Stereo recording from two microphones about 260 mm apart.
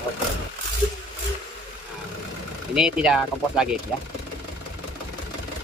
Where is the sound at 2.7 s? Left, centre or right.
Centre.